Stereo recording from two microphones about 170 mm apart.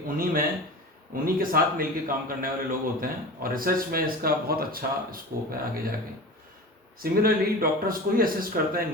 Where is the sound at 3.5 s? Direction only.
60° right (ahead or behind).